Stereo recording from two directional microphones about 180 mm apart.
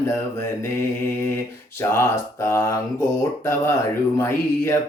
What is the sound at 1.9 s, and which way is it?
Speech, 15° left (ahead or behind).